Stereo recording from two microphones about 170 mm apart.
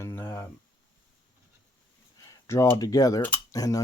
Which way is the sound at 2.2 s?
15° left (ahead or behind).